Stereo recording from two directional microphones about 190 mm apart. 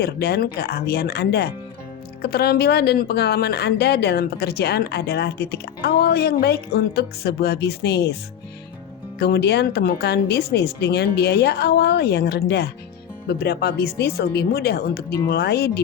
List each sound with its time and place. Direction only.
0.0 s speech: 55° left (ahead or behind)
9.1 s speech: 60° left (ahead or behind)